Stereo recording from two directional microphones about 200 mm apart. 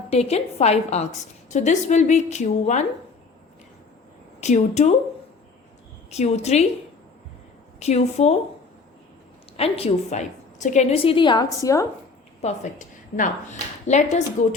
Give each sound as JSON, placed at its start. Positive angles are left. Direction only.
{"t": 0.1, "sound": "a woman's voice", "side_deg": 30}
{"t": 4.4, "sound": "speech", "side_deg": 35}
{"t": 6.1, "sound": "a woman's voice", "side_deg": 35}
{"t": 7.8, "sound": "a woman's voice", "side_deg": 35}
{"t": 9.6, "sound": "a woman's voice", "side_deg": 30}
{"t": 12.4, "sound": "a woman's voice", "side_deg": 35}